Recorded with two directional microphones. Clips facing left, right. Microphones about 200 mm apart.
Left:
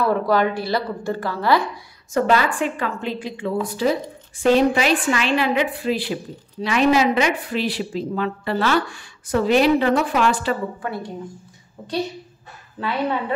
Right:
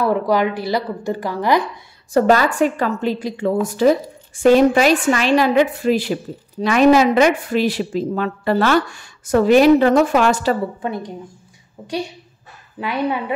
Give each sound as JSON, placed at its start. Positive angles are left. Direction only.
{"t": 0.0, "sound": "a woman's voice", "side_deg": -15}
{"t": 2.1, "sound": "a woman's voice", "side_deg": -40}
{"t": 10.8, "sound": "a woman's voice", "side_deg": -20}
{"t": 12.7, "sound": "a woman's voice", "side_deg": -15}